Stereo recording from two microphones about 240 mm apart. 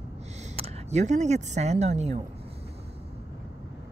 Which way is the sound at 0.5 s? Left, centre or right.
Right.